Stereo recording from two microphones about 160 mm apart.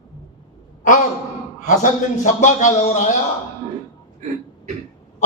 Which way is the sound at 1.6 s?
50° left (ahead or behind).